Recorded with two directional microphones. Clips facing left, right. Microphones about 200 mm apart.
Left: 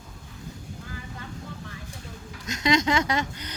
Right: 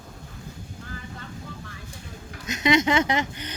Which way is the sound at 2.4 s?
20° right (ahead or behind).